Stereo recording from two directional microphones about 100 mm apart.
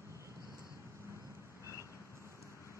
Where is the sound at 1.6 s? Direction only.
30° right (ahead or behind).